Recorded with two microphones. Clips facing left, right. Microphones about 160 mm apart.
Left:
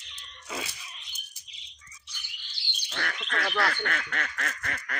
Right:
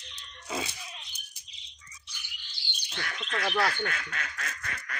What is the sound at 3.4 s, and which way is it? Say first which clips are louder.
Bird: right 1 dB; 20° right (ahead or behind).